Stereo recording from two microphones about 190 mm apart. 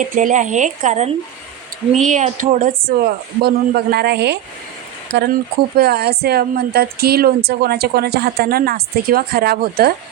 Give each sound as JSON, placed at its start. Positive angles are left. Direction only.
{"t": 0.0, "sound": "speech", "side_deg": -40}